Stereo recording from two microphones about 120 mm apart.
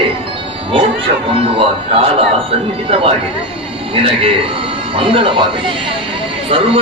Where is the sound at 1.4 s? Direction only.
50° right (ahead or behind).